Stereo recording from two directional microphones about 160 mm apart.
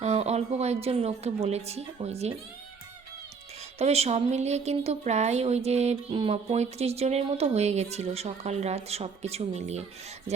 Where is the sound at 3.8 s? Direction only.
40° right (ahead or behind).